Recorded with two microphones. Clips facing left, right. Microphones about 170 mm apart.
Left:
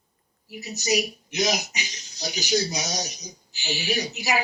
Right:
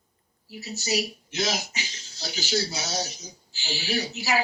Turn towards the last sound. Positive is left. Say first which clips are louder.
# even
turn(degrees=15)  # may be behind; listen again after turning